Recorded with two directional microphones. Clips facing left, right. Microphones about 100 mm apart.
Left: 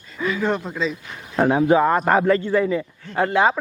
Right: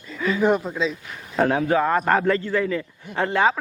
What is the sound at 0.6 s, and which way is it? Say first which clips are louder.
Speech: even; centre (ahead or behind).